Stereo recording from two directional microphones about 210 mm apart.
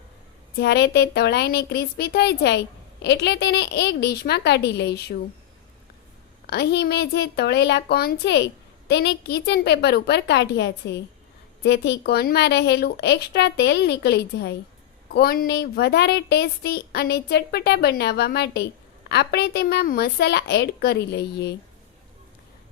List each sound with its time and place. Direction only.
0.5 s speech: 50° left (ahead or behind)
6.5 s speech: 50° left (ahead or behind)